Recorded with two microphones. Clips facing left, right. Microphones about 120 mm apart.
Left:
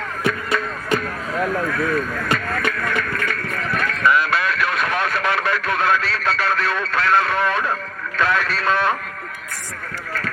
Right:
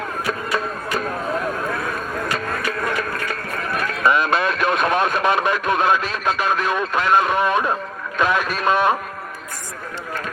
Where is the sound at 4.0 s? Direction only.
20° right (ahead or behind).